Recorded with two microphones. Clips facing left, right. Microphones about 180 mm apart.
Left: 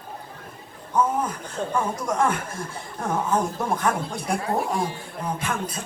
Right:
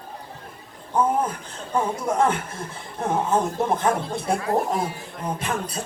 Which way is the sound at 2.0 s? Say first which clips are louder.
Right 2 dB; 25° right (ahead or behind).